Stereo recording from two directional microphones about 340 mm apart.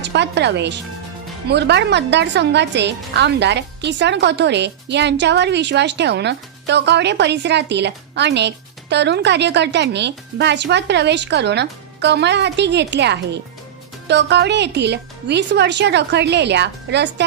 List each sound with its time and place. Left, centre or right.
0.0 s a woman's voice: right